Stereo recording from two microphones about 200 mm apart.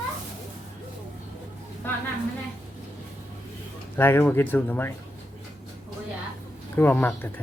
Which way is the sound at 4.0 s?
10° left (ahead or behind).